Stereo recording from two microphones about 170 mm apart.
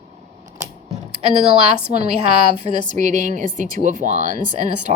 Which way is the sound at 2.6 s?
45° right (ahead or behind).